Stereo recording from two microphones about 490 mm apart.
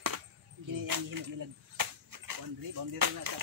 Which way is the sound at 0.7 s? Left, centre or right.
Right.